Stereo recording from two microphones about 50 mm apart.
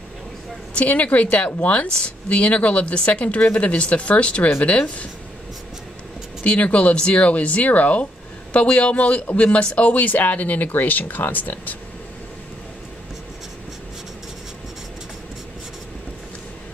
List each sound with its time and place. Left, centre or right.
0.7 s speech: left
6.4 s speech: left